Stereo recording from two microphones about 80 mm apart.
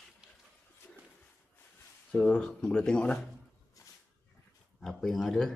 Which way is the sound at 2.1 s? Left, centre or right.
Centre.